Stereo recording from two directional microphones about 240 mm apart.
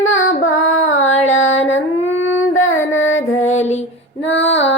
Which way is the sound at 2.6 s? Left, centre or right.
Left.